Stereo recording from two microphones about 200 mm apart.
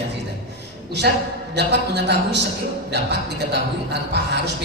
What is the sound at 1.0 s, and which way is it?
A man's voice, 50° right (ahead or behind).